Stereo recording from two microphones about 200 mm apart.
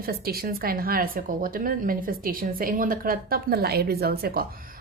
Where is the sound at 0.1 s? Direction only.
50° right (ahead or behind).